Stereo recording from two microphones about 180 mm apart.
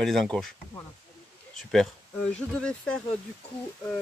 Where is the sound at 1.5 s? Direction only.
5° left (ahead or behind).